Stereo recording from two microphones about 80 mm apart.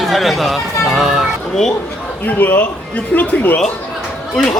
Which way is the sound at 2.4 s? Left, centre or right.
Left.